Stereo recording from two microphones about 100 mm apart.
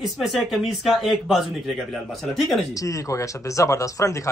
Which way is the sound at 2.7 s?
35° left (ahead or behind).